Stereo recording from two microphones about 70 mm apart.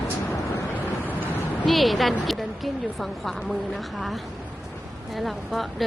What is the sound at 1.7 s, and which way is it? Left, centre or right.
Speech, centre.